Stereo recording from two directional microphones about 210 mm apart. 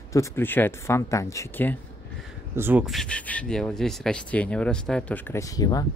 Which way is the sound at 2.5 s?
10° right (ahead or behind).